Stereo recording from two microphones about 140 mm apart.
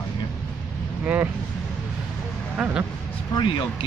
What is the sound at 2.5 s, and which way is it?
Speech, 5° right (ahead or behind).